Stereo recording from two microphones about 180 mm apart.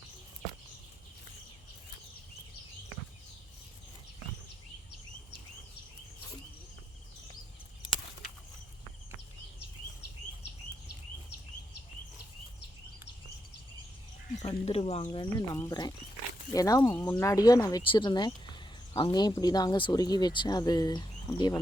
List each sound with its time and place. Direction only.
14.6 s speech: 35° left (ahead or behind)